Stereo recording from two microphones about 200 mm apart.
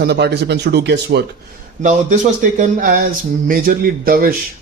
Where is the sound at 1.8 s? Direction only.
35° right (ahead or behind).